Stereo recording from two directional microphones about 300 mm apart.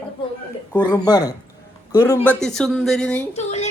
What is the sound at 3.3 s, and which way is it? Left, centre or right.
Speech, left.